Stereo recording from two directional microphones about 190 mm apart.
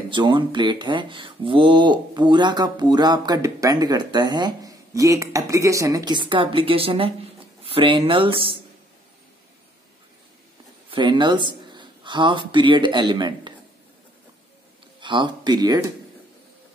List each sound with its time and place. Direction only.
0.1 s speech: 25° right (ahead or behind)
10.9 s speech: 25° right (ahead or behind)
15.0 s speech: 25° right (ahead or behind)